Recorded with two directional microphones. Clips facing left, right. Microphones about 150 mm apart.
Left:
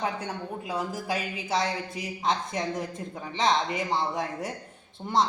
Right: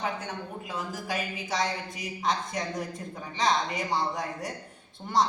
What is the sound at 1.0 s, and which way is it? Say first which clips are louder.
Speech: left 2 dB; 25° left (ahead or behind).